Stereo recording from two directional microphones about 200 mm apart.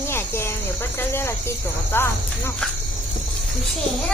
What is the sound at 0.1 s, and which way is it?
Cricket, 10° left (ahead or behind).